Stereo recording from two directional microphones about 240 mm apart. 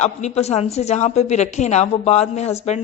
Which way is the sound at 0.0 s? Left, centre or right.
Left.